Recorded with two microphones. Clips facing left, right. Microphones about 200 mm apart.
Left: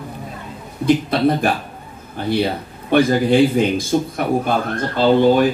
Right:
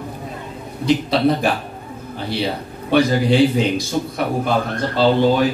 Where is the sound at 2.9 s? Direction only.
50° left (ahead or behind).